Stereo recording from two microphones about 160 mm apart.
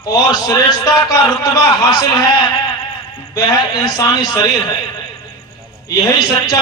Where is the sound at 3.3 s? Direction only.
25° left (ahead or behind).